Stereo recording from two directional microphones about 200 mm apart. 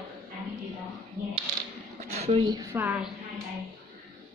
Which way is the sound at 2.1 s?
30° right (ahead or behind).